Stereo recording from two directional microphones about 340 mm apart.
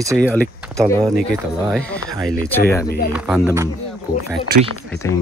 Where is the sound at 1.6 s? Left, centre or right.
Centre.